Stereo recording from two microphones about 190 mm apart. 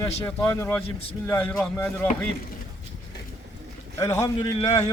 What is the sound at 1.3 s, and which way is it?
Speech, 10° left (ahead or behind).